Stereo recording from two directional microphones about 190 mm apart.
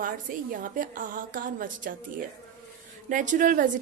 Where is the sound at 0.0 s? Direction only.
45° right (ahead or behind).